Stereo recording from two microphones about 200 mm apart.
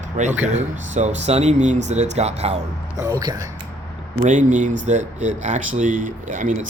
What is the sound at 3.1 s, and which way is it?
Speech, 20° right (ahead or behind).